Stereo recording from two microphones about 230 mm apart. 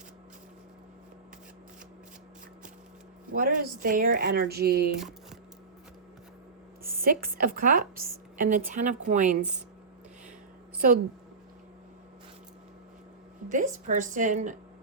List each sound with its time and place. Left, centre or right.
3.3 s a woman's voice: right
4.9 s a sound: centre
6.9 s a woman's voice: right
10.8 s a woman's voice: right
13.5 s a woman's voice: right